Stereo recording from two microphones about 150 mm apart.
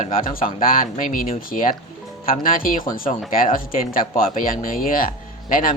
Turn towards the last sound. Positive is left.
turn(degrees=70)  # may be behind; listen again after turning